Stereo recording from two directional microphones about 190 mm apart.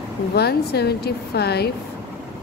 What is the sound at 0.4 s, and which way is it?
Speech, 60° left (ahead or behind).